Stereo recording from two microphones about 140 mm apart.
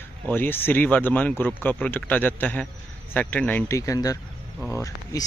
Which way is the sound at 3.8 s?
25° left (ahead or behind).